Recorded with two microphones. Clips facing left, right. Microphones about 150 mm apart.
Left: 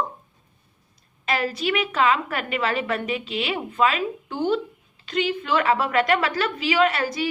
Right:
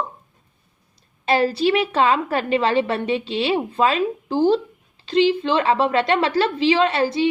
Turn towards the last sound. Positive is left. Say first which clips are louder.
# right 3 dB
turn(degrees=-25)  # may be behind; listen again after turning